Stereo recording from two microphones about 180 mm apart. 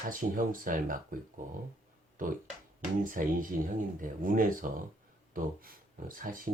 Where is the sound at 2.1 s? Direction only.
50° right (ahead or behind).